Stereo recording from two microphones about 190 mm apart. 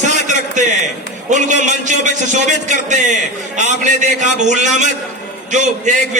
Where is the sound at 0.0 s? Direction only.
40° right (ahead or behind).